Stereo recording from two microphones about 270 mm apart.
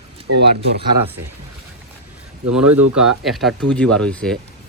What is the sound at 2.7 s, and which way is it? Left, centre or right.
Speech, right.